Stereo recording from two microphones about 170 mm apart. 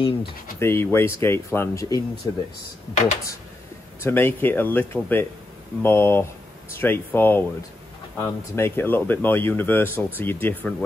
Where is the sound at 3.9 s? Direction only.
15° left (ahead or behind).